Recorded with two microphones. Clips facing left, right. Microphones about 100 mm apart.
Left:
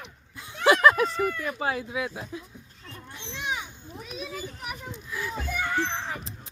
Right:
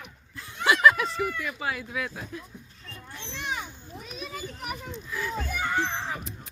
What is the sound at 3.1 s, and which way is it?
Children playing, 15° left (ahead or behind).